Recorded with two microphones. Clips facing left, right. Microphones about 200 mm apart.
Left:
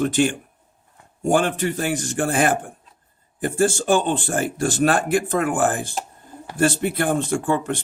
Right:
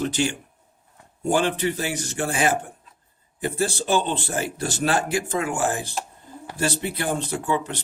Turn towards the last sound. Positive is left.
turn(degrees=50)  # may be behind; listen again after turning